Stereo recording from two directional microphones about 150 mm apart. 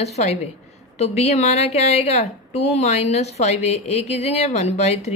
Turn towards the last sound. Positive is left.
turn(degrees=45)  # may be behind; listen again after turning